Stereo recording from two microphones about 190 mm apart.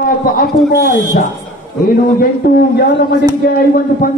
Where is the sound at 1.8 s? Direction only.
50° left (ahead or behind).